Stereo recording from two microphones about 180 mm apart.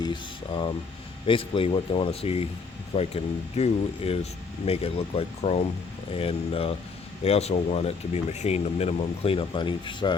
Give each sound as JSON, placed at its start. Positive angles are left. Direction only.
{"t": 0.0, "sound": "speech", "side_deg": 25}